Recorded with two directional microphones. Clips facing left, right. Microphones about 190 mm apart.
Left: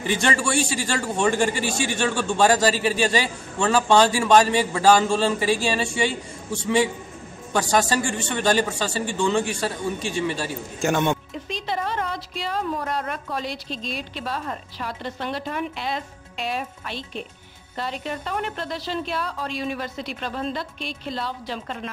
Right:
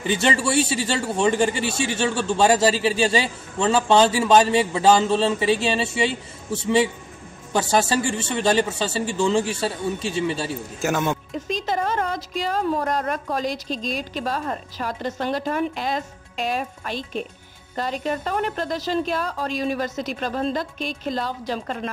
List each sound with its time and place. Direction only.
0.0 s speech: 25° right (ahead or behind)
5.0 s speech: centre (ahead or behind)
5.4 s speech: 25° right (ahead or behind)
10.8 s speech: 5° right (ahead or behind)
11.3 s a woman's voice: 45° right (ahead or behind)